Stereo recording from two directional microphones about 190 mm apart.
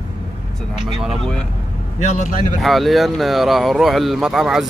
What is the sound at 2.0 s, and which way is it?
Speech, 40° left (ahead or behind).